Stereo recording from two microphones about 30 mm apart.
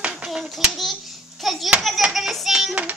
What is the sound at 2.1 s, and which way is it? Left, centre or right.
Hands, centre.